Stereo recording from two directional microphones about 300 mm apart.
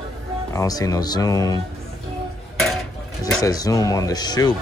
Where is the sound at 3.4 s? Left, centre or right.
Centre.